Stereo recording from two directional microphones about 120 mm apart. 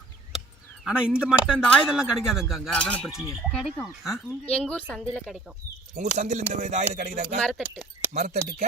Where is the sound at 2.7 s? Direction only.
10° left (ahead or behind).